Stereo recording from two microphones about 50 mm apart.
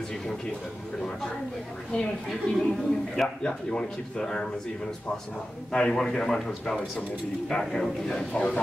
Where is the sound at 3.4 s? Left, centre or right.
Centre.